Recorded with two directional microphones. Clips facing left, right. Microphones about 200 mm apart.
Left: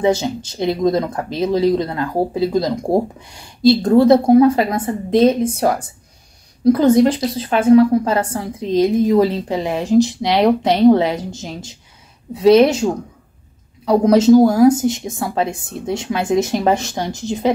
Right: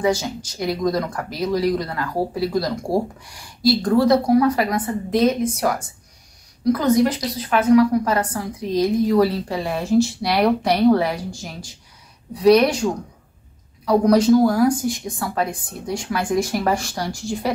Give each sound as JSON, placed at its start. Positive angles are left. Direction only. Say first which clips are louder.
{"t": 0.0, "sound": "speech", "louder": "left 4 dB", "side_deg": 25}
{"t": 13.8, "sound": "speech", "louder": "left 3 dB", "side_deg": 25}